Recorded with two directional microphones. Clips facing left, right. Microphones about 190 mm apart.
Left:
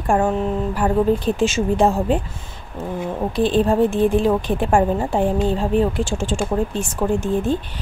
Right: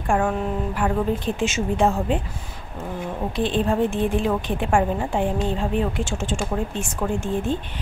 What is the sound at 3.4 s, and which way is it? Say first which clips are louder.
Speech: left 5 dB; 35° left (ahead or behind).